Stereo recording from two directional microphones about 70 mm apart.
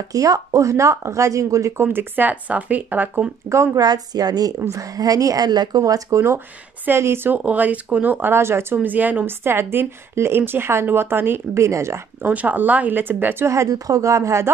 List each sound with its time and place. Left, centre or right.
0.1 s speech: right
1.8 s speech: right
3.4 s speech: right
3.8 s a woman's voice: right
4.6 s a woman's voice: right
7.3 s speech: right
8.8 s a woman's voice: right
12.2 s speech: right
13.5 s speech: right